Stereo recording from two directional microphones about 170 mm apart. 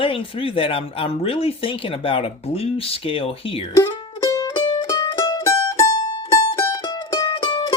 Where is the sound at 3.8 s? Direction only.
20° left (ahead or behind).